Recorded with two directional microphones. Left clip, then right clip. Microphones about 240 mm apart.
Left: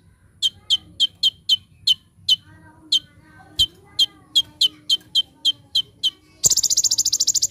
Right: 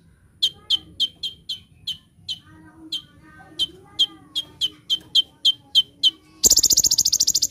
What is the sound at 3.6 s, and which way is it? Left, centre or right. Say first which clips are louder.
Bird: left 3 dB; left.